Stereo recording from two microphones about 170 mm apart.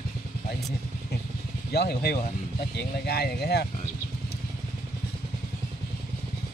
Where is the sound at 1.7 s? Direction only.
70° left (ahead or behind).